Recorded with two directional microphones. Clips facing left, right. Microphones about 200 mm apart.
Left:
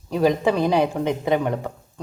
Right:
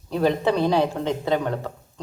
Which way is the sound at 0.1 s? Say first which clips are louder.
Left 2 dB; 10° left (ahead or behind).